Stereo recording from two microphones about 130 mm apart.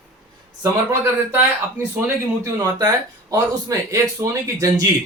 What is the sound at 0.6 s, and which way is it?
Speech, 20° right (ahead or behind).